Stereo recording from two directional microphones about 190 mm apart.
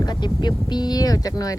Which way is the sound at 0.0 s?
20° left (ahead or behind).